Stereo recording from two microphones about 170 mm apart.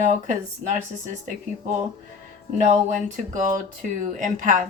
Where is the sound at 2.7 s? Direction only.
45° right (ahead or behind).